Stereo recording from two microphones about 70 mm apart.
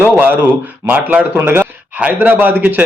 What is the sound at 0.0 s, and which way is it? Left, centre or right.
A man's voice, right.